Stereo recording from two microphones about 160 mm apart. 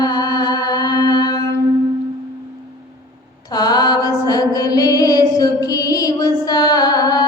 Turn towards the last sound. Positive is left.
turn(degrees=25)  # may be behind; listen again after turning